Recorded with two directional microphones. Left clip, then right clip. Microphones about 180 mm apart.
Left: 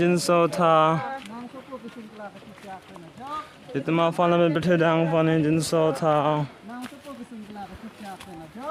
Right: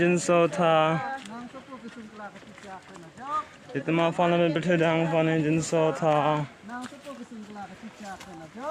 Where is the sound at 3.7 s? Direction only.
25° left (ahead or behind).